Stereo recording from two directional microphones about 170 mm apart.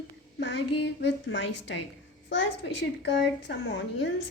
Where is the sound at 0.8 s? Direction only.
90° left.